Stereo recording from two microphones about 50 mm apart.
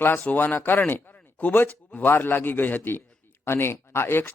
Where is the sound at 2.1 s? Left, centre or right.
Left.